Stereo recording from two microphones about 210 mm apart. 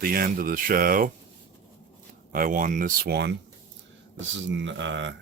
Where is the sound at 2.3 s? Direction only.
40° right (ahead or behind).